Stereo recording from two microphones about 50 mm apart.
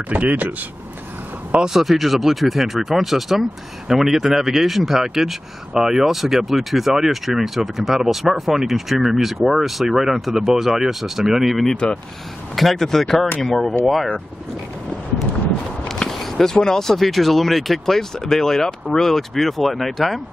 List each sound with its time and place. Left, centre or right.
0.1 s speech: right
1.6 s speech: centre
11.7 s speech: centre
12.5 s speech: centre
16.1 s speech: centre